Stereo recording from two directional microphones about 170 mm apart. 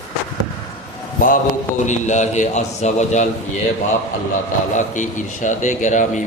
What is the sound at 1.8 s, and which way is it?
A man's voice, 45° left (ahead or behind).